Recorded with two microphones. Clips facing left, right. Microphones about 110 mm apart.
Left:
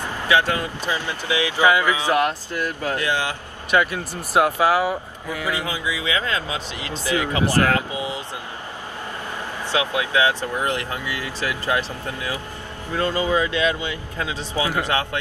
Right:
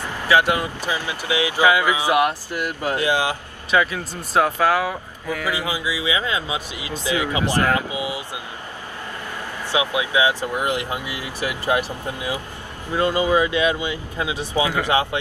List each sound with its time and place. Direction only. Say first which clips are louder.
0.4 s speech: right 2 dB; 15° right (ahead or behind)
4.3 s speech: even; 10° left (ahead or behind)
5.5 s speech: even; 15° right (ahead or behind)
9.7 s speech: right 1 dB; 15° right (ahead or behind)